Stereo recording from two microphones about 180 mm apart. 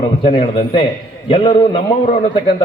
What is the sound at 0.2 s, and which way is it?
A man's voice, 30° left (ahead or behind).